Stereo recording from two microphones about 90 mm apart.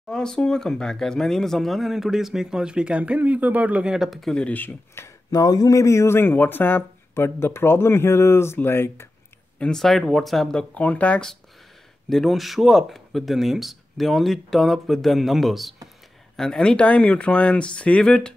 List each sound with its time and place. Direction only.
0.1 s speech: 10° left (ahead or behind)
4.5 s speech: 20° left (ahead or behind)
5.0 s speech: 40° left (ahead or behind)
9.6 s speech: 5° left (ahead or behind)
12.1 s speech: centre (ahead or behind)